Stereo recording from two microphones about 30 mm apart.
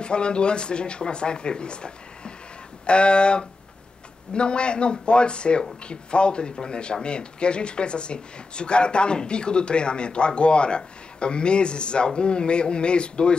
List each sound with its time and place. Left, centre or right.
0.0 s speech: left